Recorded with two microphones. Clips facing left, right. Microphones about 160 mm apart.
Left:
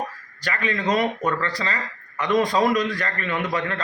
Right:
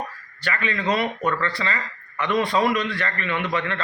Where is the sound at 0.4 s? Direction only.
40° left (ahead or behind).